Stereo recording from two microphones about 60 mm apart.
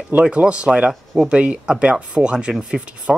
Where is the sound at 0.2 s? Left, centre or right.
Centre.